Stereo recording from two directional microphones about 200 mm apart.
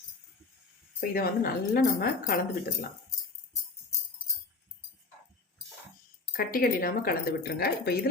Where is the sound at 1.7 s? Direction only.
45° left (ahead or behind).